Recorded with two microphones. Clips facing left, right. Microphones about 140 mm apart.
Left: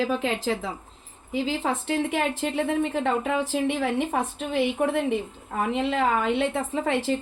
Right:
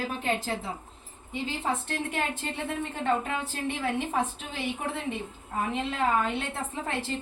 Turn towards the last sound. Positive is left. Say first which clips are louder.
# left 8 dB
turn(degrees=90)